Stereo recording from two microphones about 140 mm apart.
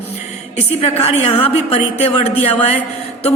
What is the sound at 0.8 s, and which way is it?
A man's voice, 45° left (ahead or behind).